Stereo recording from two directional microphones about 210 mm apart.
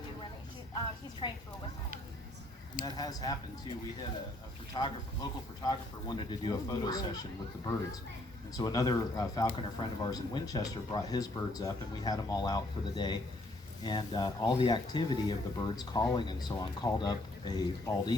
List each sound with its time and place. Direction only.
1.2 s speech: 20° left (ahead or behind)
2.8 s speech: 20° left (ahead or behind)
4.7 s speech: 20° left (ahead or behind)
8.5 s speech: 15° left (ahead or behind)